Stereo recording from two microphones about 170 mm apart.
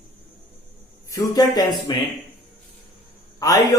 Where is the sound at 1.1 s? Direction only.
25° left (ahead or behind).